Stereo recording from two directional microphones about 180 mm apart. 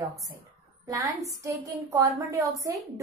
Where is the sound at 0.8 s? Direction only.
20° right (ahead or behind).